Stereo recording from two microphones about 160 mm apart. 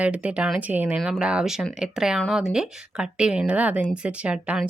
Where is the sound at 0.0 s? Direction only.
10° right (ahead or behind).